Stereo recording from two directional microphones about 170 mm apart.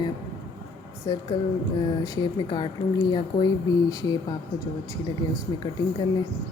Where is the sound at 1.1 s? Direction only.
25° left (ahead or behind).